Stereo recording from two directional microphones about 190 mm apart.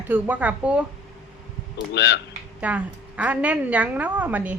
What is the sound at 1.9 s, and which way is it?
Speech, 65° left (ahead or behind).